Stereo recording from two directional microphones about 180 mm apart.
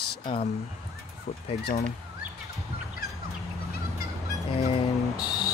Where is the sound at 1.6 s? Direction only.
65° left (ahead or behind).